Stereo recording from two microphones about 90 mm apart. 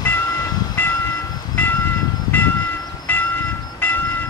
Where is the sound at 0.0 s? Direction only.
20° left (ahead or behind).